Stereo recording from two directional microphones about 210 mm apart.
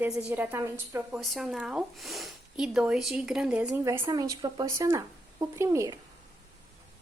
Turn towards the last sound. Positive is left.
turn(degrees=-15)  # may be behind; listen again after turning